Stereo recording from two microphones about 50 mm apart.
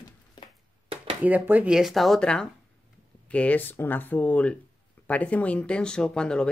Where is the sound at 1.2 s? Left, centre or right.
Right.